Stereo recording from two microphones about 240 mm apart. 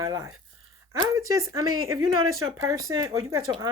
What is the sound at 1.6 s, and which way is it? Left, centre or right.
Speech, right.